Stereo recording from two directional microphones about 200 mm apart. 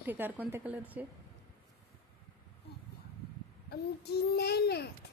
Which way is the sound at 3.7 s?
55° left (ahead or behind).